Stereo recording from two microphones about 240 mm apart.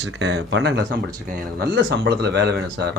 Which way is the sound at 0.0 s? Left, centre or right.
Right.